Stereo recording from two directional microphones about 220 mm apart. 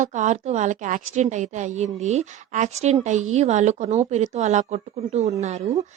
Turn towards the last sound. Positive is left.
turn(degrees=-30)  # may be behind; listen again after turning